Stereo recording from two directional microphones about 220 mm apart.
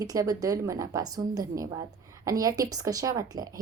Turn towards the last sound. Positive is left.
turn(degrees=-15)  # may be behind; listen again after turning